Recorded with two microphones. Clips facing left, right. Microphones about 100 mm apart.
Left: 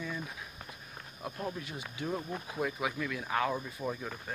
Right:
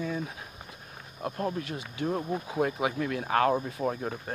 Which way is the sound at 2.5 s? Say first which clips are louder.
Right 5 dB; 55° right (ahead or behind).